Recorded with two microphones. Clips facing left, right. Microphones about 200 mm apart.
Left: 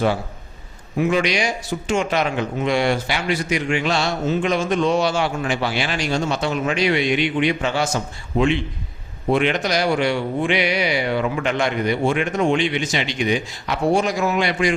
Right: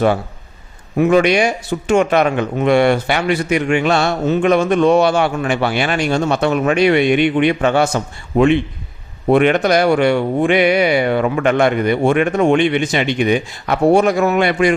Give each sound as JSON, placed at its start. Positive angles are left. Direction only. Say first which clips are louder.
{"t": 0.9, "sound": "a man's voice", "louder": "right 7 dB", "side_deg": -55}